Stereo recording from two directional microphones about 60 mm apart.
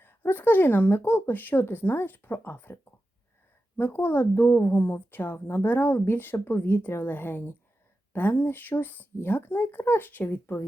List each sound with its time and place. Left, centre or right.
0.0 s a woman's voice: left
3.8 s a woman's voice: left